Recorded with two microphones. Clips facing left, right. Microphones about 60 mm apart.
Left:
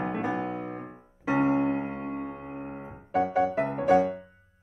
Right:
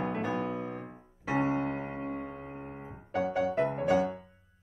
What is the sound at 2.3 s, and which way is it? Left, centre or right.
Music, left.